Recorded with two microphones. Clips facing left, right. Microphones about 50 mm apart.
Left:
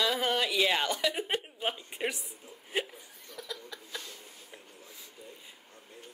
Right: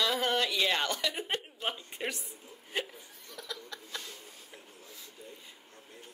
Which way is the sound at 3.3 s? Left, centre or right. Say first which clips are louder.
Left 1 dB; centre.